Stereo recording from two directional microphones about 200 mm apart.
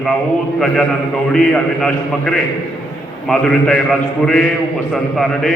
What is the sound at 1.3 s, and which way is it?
A man's voice, 5° left (ahead or behind).